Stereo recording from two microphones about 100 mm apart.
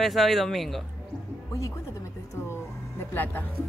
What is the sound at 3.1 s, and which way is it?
Speech, 20° left (ahead or behind).